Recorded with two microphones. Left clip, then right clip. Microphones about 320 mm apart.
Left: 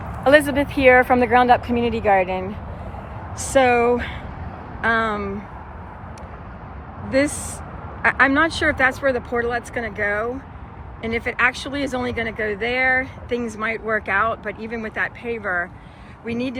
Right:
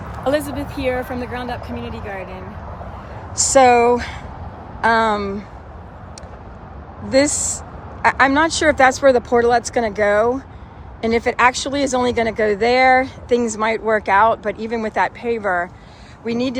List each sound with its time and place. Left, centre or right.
0.3 s speech: centre
3.4 s speech: centre
7.1 s speech: centre